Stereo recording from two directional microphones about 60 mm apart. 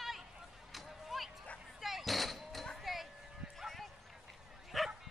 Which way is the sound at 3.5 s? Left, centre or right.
Centre.